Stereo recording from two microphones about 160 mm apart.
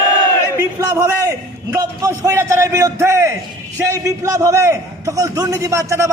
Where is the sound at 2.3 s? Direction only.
15° right (ahead or behind).